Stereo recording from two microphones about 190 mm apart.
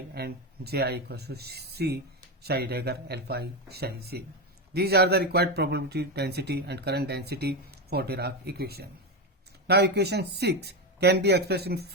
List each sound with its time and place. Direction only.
0.1 s speech: 60° right (ahead or behind)